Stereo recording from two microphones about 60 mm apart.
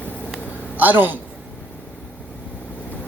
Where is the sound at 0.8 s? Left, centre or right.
Right.